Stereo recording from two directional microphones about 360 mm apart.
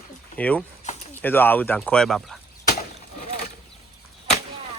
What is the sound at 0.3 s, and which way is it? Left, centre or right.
Speech, centre.